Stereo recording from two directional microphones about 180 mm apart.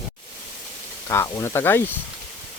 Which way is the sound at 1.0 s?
15° left (ahead or behind).